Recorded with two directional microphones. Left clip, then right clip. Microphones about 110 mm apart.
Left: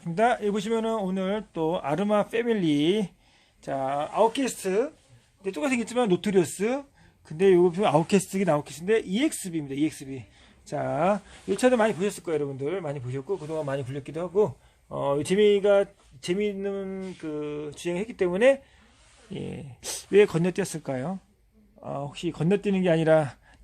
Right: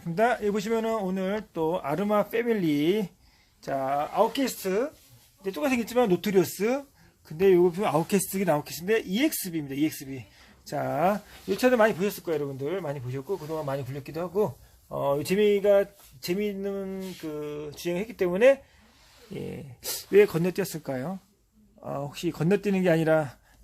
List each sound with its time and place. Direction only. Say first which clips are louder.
0.0 s speech: left 1 dB; 10° left (ahead or behind)
1.6 s speech: left 1 dB; 30° left (ahead or behind)
3.6 s speech: right 1 dB; 10° left (ahead or behind)
7.6 s speech: left 2 dB; 35° left (ahead or behind)
8.7 s speech: left 1 dB; 5° left (ahead or behind)
19.3 s speech: even; 30° left (ahead or behind)
21.8 s speech: even; 10° left (ahead or behind)
23.0 s speech: left 3 dB; 35° left (ahead or behind)